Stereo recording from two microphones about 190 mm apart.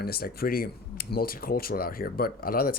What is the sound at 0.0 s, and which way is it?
Speech, 50° left (ahead or behind).